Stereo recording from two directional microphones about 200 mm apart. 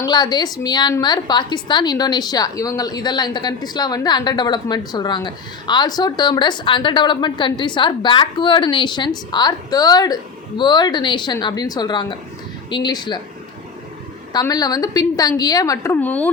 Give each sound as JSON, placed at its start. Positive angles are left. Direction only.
{"t": 0.0, "sound": "a woman's voice", "side_deg": 20}
{"t": 14.3, "sound": "a woman's voice", "side_deg": 20}